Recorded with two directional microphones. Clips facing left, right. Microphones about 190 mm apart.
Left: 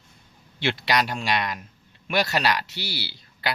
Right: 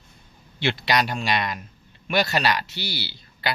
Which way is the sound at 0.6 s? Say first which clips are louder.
Right 1 dB; 5° left (ahead or behind).